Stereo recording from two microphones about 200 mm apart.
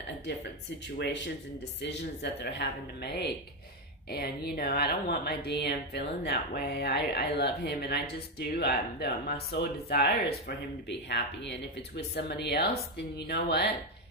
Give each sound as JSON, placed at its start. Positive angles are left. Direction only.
{"t": 0.7, "sound": "speech", "side_deg": 60}